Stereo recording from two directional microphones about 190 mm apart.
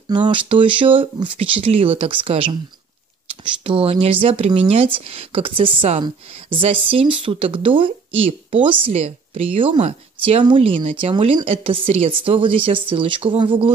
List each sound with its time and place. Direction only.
0.1 s speech: 25° right (ahead or behind)